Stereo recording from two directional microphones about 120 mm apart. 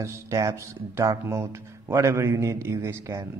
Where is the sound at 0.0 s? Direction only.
25° right (ahead or behind).